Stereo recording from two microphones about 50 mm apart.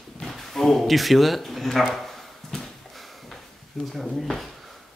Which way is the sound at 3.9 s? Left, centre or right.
Centre.